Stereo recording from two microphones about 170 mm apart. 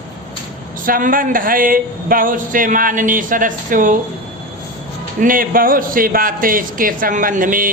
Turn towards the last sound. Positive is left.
turn(degrees=-55)  # may be behind; listen again after turning